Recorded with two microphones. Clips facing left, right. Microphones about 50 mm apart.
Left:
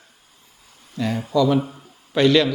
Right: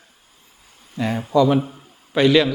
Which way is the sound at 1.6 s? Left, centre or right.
Centre.